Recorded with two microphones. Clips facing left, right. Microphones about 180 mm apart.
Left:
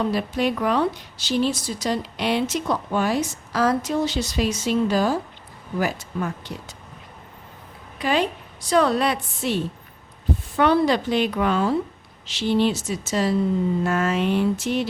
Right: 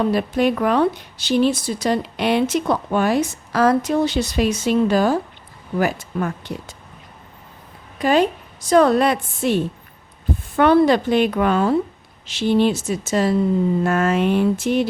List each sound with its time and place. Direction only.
0.1 s a woman's voice: 55° right (ahead or behind)
7.9 s a woman's voice: 45° right (ahead or behind)
10.6 s a woman's voice: 55° right (ahead or behind)